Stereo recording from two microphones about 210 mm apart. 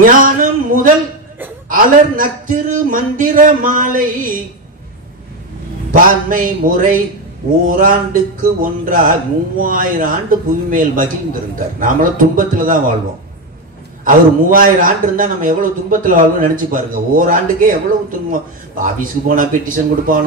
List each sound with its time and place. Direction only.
0.0 s a sound: 40° right (ahead or behind)
1.7 s a man's voice: 40° right (ahead or behind)
5.9 s a man's voice: 40° right (ahead or behind)
14.0 s a man's voice: 40° right (ahead or behind)
18.8 s a man's voice: 40° right (ahead or behind)